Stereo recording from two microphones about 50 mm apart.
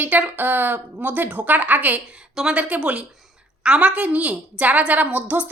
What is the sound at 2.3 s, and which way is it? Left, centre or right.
Speech, centre.